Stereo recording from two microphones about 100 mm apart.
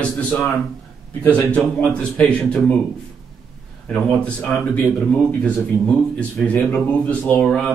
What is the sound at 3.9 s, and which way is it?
Speech, 10° left (ahead or behind).